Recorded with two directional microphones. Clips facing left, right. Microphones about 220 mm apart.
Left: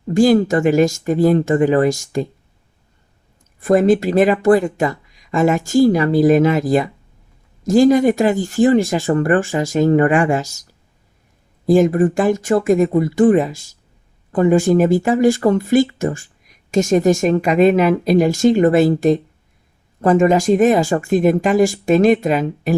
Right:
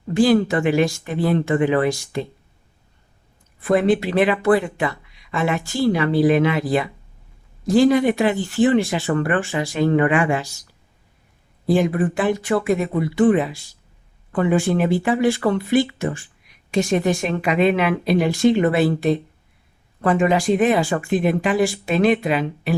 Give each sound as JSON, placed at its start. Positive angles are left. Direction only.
{"t": 0.1, "sound": "speech", "side_deg": 45}
{"t": 3.6, "sound": "speech", "side_deg": 45}